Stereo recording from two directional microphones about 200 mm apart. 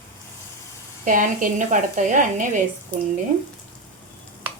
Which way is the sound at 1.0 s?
40° right (ahead or behind).